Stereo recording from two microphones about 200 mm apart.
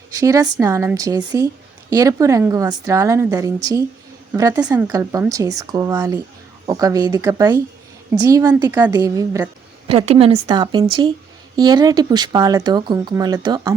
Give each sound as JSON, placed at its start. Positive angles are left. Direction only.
{"t": 0.1, "sound": "a woman's voice", "side_deg": -15}
{"t": 4.9, "sound": "a woman's voice", "side_deg": -15}
{"t": 9.9, "sound": "speech", "side_deg": -30}